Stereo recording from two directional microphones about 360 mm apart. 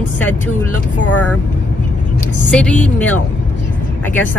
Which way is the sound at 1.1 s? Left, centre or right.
Left.